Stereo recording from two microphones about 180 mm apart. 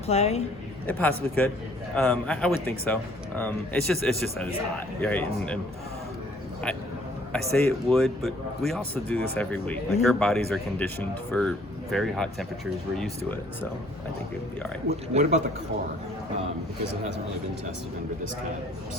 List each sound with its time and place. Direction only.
0.1 s speech: 35° left (ahead or behind)
0.9 s speech: 10° left (ahead or behind)
7.5 s speech: centre (ahead or behind)
14.8 s speech: 40° right (ahead or behind)